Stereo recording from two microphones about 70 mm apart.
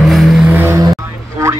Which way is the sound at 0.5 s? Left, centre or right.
Right.